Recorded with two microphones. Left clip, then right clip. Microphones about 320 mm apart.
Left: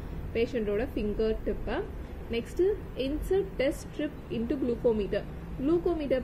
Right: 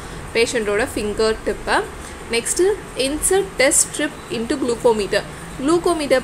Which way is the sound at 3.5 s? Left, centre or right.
Centre.